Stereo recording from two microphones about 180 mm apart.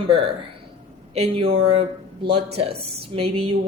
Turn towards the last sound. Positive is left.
turn(degrees=-30)  # may be behind; listen again after turning